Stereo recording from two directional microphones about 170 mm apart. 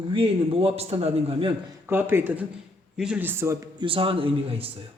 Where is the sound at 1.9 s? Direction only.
15° right (ahead or behind).